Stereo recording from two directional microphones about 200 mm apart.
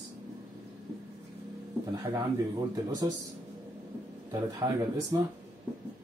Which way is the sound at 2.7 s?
20° right (ahead or behind).